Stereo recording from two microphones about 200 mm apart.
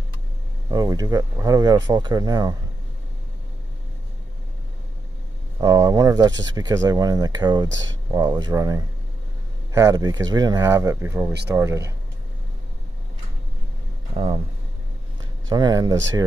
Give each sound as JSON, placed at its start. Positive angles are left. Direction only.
{"t": 0.7, "sound": "speech", "side_deg": -20}
{"t": 5.6, "sound": "speech", "side_deg": -20}
{"t": 7.6, "sound": "speech", "side_deg": -65}
{"t": 8.1, "sound": "speech", "side_deg": -20}
{"t": 14.1, "sound": "speech", "side_deg": -30}
{"t": 15.5, "sound": "speech", "side_deg": -20}